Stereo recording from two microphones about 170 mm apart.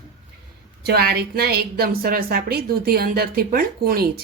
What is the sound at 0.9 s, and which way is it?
A woman's voice, 70° right (ahead or behind).